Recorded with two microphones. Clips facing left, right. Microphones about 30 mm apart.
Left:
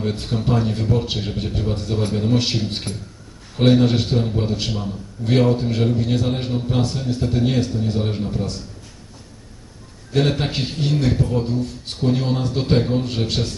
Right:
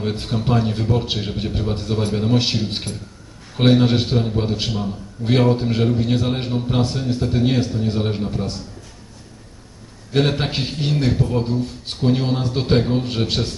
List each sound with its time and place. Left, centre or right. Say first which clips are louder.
0.0 s a man's voice: even; centre
4.0 s a man's voice: right 1 dB; centre
10.4 s a man's voice: even; centre